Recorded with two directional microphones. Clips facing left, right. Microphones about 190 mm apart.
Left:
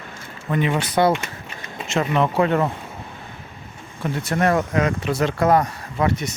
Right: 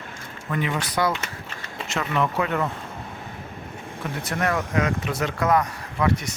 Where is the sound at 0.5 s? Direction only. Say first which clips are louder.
Left 5 dB; 25° left (ahead or behind).